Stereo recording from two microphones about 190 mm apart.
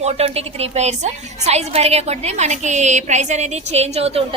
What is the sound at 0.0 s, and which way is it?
A woman's voice, 35° right (ahead or behind).